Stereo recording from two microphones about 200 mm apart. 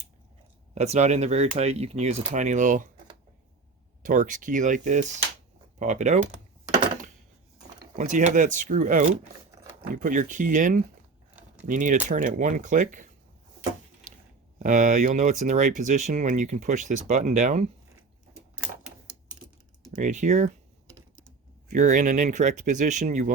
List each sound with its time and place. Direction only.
0.7 s speech: 35° right (ahead or behind)
4.0 s speech: 40° right (ahead or behind)
7.9 s speech: 35° right (ahead or behind)
14.6 s speech: 40° right (ahead or behind)
20.0 s speech: 40° right (ahead or behind)
21.7 s speech: 40° right (ahead or behind)